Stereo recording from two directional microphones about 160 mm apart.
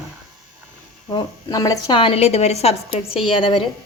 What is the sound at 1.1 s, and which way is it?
A woman's voice, 25° left (ahead or behind).